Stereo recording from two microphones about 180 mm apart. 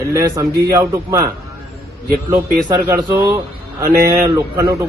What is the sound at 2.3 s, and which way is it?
Speech, 20° right (ahead or behind).